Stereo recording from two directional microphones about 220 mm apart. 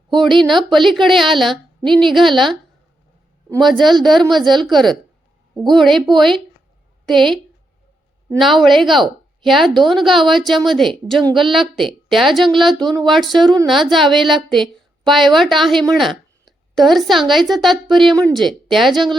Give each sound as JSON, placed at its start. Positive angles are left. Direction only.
{"t": 0.2, "sound": "a woman's voice", "side_deg": 0}
{"t": 3.6, "sound": "a woman's voice", "side_deg": 0}